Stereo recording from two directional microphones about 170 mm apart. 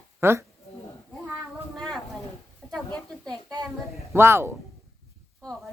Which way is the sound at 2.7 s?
5° left (ahead or behind).